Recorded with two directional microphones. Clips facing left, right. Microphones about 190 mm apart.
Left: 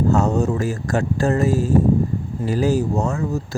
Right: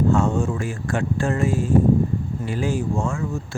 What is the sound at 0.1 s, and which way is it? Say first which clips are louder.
Speech: left 2 dB; 40° left (ahead or behind).